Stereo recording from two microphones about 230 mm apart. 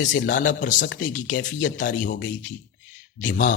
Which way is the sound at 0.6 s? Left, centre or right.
Left.